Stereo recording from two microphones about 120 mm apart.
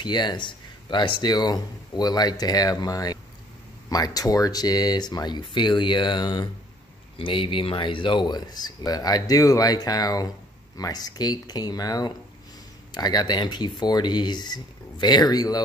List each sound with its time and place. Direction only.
0.0 s speech: 35° left (ahead or behind)